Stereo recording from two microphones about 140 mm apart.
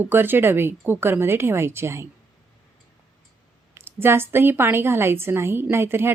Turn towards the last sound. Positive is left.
turn(degrees=-15)  # may be behind; listen again after turning